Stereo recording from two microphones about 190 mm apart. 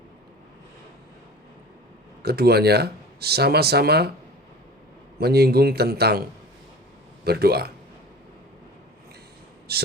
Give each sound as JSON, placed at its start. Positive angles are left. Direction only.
{"t": 2.2, "sound": "speech", "side_deg": -55}
{"t": 5.2, "sound": "speech", "side_deg": -55}
{"t": 7.3, "sound": "speech", "side_deg": -55}
{"t": 9.7, "sound": "speech", "side_deg": -60}